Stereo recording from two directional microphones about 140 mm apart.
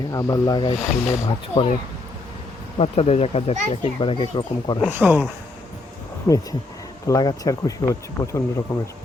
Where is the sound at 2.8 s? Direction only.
45° left (ahead or behind).